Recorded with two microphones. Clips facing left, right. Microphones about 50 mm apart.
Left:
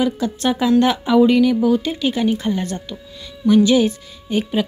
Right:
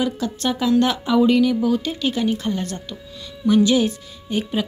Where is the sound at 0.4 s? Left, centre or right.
Centre.